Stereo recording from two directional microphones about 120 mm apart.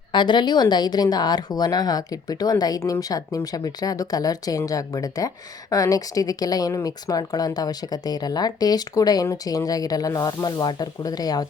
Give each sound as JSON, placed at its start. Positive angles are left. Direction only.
{"t": 0.1, "sound": "speech", "side_deg": 40}